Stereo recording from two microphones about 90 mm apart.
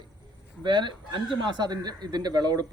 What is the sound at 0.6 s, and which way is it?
A woman's voice, 60° right (ahead or behind).